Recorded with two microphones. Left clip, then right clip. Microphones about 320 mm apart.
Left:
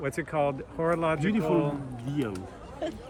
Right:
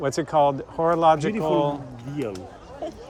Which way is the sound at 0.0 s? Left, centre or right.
Centre.